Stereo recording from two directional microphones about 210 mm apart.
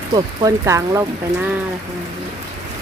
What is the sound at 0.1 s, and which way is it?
Speech, 15° right (ahead or behind).